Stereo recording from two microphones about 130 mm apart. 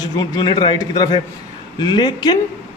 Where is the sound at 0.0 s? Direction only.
30° left (ahead or behind).